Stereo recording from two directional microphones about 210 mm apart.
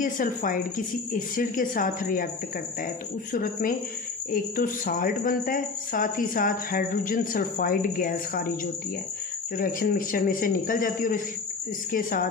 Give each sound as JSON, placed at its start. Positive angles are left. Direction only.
{"t": 0.0, "sound": "speech", "side_deg": 40}
{"t": 3.3, "sound": "speech", "side_deg": 40}
{"t": 9.6, "sound": "speech", "side_deg": 45}